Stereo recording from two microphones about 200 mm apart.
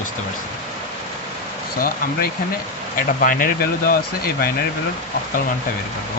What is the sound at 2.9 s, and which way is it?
Speech, 45° left (ahead or behind).